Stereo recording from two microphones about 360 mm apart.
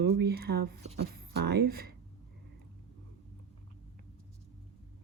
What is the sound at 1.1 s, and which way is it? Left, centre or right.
Speech, right.